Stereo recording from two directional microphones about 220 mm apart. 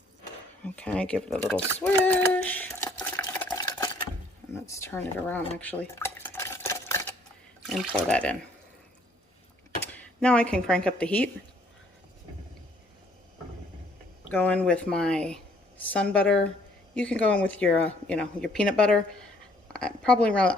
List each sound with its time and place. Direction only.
0.6 s speech: 5° left (ahead or behind)
1.8 s stir: 5° left (ahead or behind)
3.6 s a sound: 15° left (ahead or behind)
4.6 s cutlery: 10° left (ahead or behind)
7.7 s speech: 5° left (ahead or behind)
9.8 s speech: 5° left (ahead or behind)
14.3 s a woman's voice: 5° left (ahead or behind)